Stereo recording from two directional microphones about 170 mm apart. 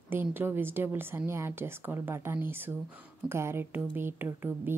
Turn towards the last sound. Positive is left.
turn(degrees=-10)  # may be behind; listen again after turning